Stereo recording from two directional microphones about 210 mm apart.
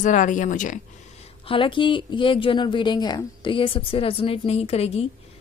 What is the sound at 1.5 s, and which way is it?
A woman's voice, 25° left (ahead or behind).